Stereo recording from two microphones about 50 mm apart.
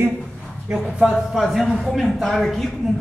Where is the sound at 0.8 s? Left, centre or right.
Centre.